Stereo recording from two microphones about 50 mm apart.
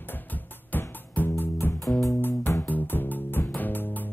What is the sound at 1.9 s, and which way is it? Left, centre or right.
Music, left.